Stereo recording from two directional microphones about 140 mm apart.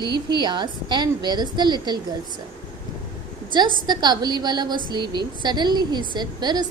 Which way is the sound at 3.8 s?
30° right (ahead or behind).